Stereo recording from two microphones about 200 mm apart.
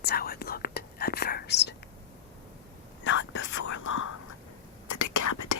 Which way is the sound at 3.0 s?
65° left (ahead or behind).